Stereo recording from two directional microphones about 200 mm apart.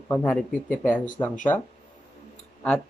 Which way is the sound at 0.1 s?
5° left (ahead or behind).